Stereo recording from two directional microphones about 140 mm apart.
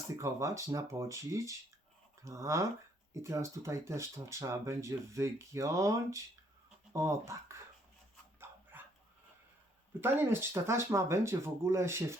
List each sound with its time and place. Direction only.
0.2 s speech: 20° right (ahead or behind)
8.7 s dog: 15° right (ahead or behind)
10.0 s speech: 15° right (ahead or behind)